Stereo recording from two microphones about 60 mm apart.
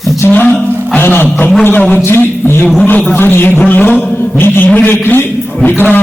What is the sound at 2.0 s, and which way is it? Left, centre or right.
Speech, left.